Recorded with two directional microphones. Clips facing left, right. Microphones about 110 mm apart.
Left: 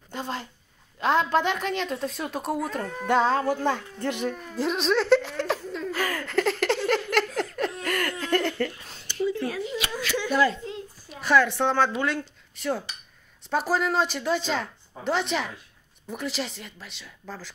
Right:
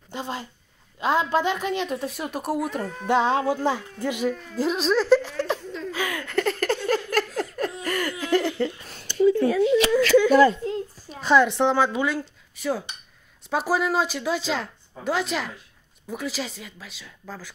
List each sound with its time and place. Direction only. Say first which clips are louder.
0.1 s speech: right 1 dB; 10° right (ahead or behind)
4.6 s giggle: right 1 dB; centre (ahead or behind)
7.8 s laughter: right 1 dB; 5° right (ahead or behind)
9.6 s speech: right 12 dB; 90° right
10.3 s a sound: right 7 dB; 45° right (ahead or behind)
11.1 s speech: right 3 dB; 20° right (ahead or behind); by 17.5 s 5° right (ahead or behind)